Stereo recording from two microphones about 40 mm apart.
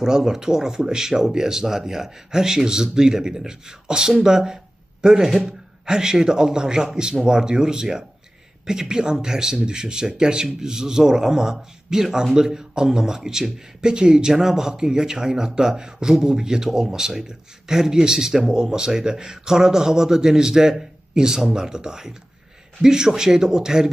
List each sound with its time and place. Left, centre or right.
0.0 s a man's voice: centre